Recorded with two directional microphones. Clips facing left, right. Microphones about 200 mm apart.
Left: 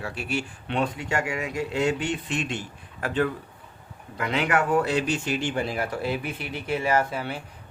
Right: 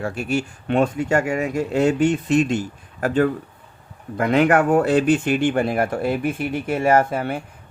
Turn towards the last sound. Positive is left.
turn(degrees=-50)  # may be behind; listen again after turning